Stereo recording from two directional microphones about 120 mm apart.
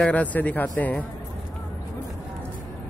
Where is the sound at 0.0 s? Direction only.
10° left (ahead or behind).